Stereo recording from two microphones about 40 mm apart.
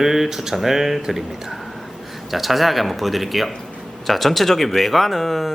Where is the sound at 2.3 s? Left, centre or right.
Centre.